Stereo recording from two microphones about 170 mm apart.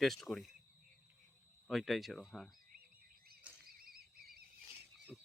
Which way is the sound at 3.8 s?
60° right (ahead or behind).